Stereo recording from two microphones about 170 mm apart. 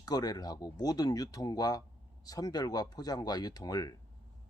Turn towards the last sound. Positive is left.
turn(degrees=20)  # may be behind; listen again after turning